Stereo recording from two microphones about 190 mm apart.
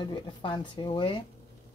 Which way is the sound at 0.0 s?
25° left (ahead or behind).